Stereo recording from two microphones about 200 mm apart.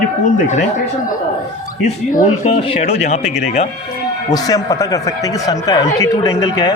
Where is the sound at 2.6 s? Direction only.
30° left (ahead or behind).